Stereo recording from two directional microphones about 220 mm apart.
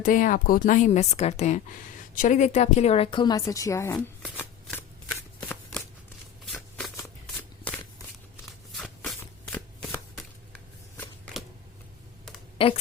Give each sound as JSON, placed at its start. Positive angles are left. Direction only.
{"t": 0.0, "sound": "a woman's voice", "side_deg": 35}
{"t": 5.4, "sound": "shuffling cards", "side_deg": 5}
{"t": 8.7, "sound": "shuffling cards", "side_deg": 0}
{"t": 12.5, "sound": "a sound", "side_deg": 25}